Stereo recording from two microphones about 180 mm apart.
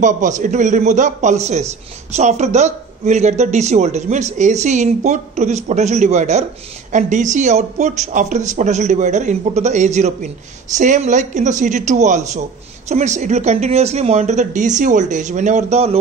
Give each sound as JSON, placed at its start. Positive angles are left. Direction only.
{"t": 0.0, "sound": "a man's voice", "side_deg": -45}